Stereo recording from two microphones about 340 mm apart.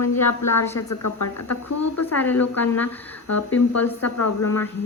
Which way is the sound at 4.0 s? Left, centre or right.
Left.